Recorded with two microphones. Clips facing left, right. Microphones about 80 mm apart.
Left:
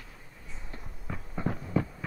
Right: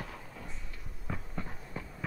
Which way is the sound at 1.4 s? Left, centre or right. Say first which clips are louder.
Left 13 dB; left.